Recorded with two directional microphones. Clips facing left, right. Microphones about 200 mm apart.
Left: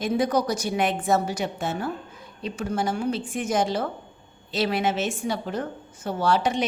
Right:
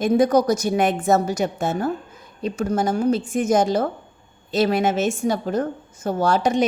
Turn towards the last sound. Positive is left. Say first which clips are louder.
# right 4 dB
turn(degrees=-45)  # may be behind; listen again after turning